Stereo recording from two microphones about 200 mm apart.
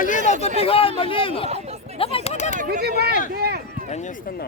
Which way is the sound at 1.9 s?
30° left (ahead or behind).